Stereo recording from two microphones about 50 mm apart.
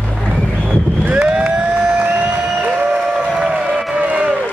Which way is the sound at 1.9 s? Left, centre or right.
Right.